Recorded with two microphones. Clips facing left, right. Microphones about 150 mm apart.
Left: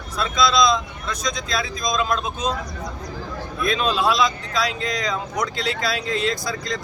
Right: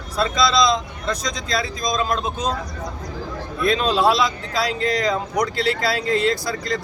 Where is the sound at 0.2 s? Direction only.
35° right (ahead or behind).